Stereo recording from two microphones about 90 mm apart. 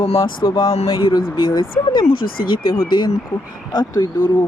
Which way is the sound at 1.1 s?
65° left (ahead or behind).